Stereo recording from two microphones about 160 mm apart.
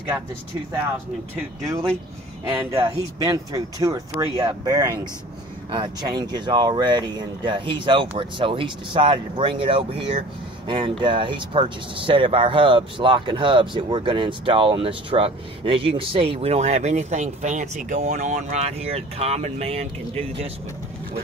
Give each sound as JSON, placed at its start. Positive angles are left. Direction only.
{"t": 2.4, "sound": "speech", "side_deg": -20}